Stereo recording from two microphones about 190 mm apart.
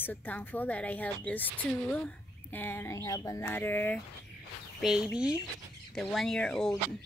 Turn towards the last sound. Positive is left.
turn(degrees=0)  # may be behind; listen again after turning